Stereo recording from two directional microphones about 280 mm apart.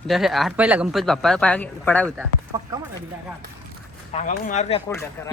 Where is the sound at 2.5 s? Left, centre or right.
Centre.